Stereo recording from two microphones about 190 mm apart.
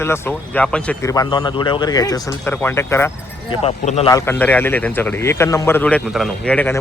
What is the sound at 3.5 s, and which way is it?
Speech, 35° left (ahead or behind).